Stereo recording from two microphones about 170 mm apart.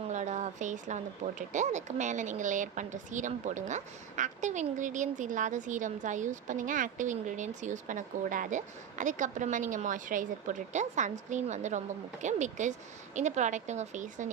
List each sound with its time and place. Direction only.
0.1 s speech: 45° right (ahead or behind)